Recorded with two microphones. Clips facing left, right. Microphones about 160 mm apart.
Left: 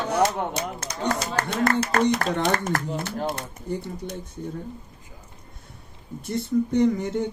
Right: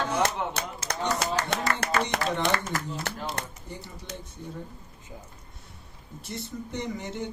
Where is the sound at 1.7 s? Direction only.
55° left (ahead or behind).